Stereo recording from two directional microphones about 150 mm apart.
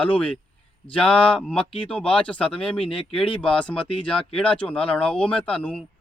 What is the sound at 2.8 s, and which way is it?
Speech, 35° left (ahead or behind).